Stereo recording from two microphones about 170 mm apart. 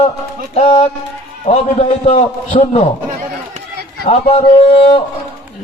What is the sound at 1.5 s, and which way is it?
Speech, 40° left (ahead or behind).